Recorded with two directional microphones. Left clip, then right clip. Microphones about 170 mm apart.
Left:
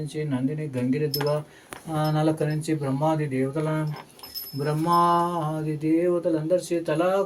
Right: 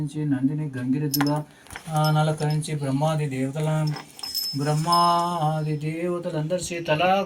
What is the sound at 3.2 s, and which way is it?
Speech, 35° left (ahead or behind).